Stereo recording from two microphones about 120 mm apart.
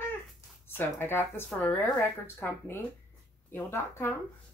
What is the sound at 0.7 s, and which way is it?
A woman's voice, 20° left (ahead or behind).